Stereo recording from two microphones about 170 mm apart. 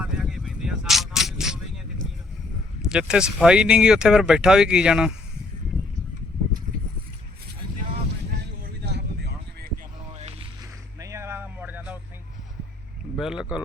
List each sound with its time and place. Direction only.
0.0 s vehicle: 5° right (ahead or behind)
2.9 s speech: 5° right (ahead or behind)
8.3 s a sound: 70° right (ahead or behind)
10.1 s a sound: 35° right (ahead or behind)
11.0 s music: 15° right (ahead or behind)
13.1 s speech: 5° right (ahead or behind)